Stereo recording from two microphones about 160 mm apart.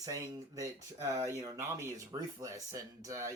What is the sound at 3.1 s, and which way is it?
Speech, 20° right (ahead or behind).